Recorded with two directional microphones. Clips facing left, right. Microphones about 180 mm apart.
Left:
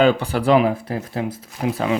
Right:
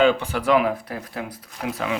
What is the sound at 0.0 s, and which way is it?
Speech, 35° left (ahead or behind).